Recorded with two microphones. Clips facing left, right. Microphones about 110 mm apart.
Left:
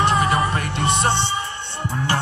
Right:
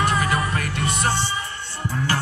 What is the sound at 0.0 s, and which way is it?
Music, 25° left (ahead or behind).